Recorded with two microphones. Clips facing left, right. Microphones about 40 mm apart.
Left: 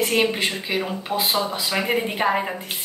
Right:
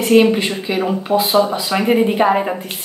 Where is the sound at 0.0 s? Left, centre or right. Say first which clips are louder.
Right 8 dB; centre.